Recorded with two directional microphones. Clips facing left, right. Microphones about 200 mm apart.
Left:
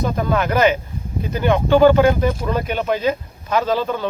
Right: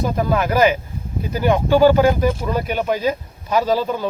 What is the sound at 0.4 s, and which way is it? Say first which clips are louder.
Speech: even; 10° right (ahead or behind).